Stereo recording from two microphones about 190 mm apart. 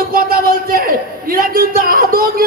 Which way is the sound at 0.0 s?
50° right (ahead or behind).